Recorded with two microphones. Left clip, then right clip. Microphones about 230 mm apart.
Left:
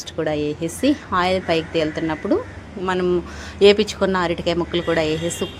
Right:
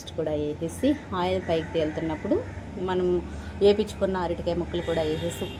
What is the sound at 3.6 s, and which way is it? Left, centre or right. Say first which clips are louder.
A woman's voice: left 7 dB; left.